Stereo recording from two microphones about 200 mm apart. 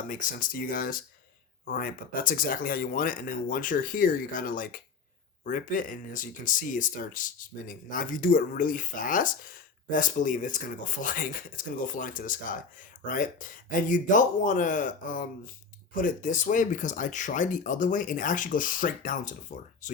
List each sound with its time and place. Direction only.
0.1 s speech: 40° left (ahead or behind)